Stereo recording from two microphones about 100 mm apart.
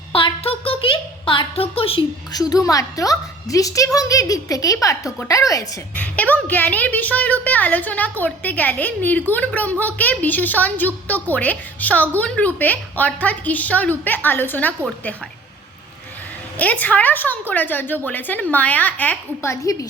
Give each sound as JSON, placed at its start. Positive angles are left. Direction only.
{"t": 0.1, "sound": "a sound", "side_deg": 60}
{"t": 2.3, "sound": "a woman's voice", "side_deg": 40}
{"t": 6.0, "sound": "a woman's voice", "side_deg": 15}
{"t": 16.6, "sound": "a woman's voice", "side_deg": 15}
{"t": 19.4, "sound": "a woman's voice", "side_deg": 30}